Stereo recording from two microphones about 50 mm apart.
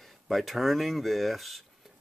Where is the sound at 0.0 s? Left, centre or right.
Centre.